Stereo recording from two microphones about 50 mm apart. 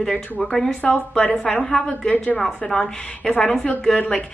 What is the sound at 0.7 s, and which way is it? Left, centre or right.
Speech, left.